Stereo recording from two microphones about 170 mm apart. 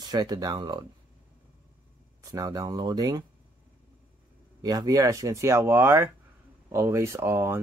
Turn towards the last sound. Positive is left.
turn(degrees=-15)  # may be behind; listen again after turning